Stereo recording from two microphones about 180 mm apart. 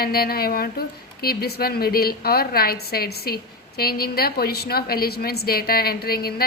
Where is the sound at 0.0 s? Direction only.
55° left (ahead or behind).